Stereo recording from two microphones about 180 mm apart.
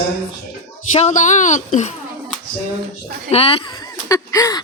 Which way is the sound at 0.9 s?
40° left (ahead or behind).